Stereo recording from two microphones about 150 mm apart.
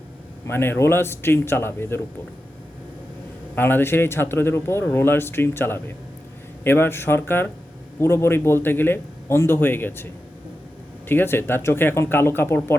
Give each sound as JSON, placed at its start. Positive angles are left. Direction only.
{"t": 0.4, "sound": "a man's voice", "side_deg": 15}
{"t": 3.5, "sound": "a man's voice", "side_deg": 15}
{"t": 11.1, "sound": "a man's voice", "side_deg": 15}